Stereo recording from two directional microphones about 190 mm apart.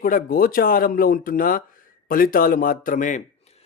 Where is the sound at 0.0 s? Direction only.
50° left (ahead or behind).